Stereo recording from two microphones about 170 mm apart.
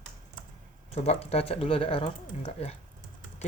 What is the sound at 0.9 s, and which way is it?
Speech, 35° left (ahead or behind).